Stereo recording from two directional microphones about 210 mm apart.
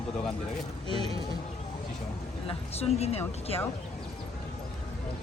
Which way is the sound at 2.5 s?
30° left (ahead or behind).